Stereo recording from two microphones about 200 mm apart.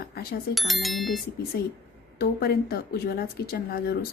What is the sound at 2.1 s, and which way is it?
A woman's voice, 50° left (ahead or behind).